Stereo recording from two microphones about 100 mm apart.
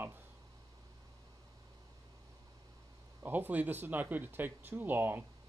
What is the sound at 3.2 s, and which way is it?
Speech, 20° right (ahead or behind).